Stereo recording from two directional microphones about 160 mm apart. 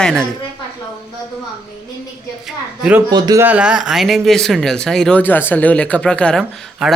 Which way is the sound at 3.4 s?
10° right (ahead or behind).